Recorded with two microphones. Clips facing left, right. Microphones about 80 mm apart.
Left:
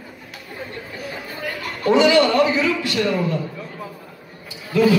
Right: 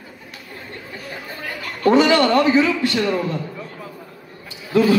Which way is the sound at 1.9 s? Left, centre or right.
Right.